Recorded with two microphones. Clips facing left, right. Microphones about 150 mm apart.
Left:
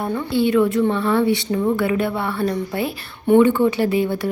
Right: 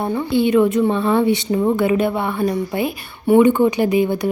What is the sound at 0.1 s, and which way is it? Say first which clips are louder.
Speech: right 2 dB; 15° right (ahead or behind).